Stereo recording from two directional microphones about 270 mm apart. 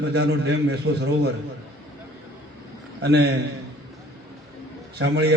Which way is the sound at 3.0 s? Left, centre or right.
Right.